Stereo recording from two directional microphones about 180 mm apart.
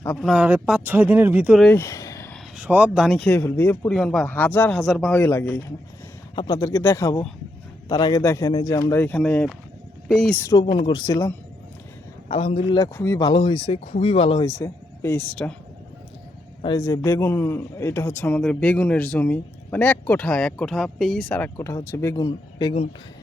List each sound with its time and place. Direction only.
0.0 s speech: 5° left (ahead or behind)
1.6 s speech: 15° left (ahead or behind)
2.6 s speech: 5° right (ahead or behind)
3.2 s a man's voice: 10° left (ahead or behind)
6.3 s a man's voice: 25° left (ahead or behind); by 10.3 s centre (ahead or behind)
10.3 s a man's voice: 15° left (ahead or behind)
12.3 s speech: 35° left (ahead or behind)
12.7 s speech: 20° left (ahead or behind)
14.4 s speech: 15° left (ahead or behind)
16.6 s a man's voice: 20° left (ahead or behind)